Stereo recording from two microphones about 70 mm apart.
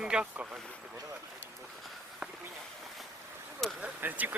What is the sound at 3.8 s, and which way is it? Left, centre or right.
Speech, right.